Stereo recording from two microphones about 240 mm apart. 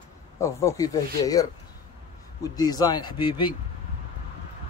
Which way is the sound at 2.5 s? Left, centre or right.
Centre.